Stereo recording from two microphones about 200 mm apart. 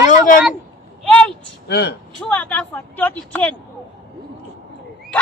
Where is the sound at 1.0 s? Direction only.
5° left (ahead or behind).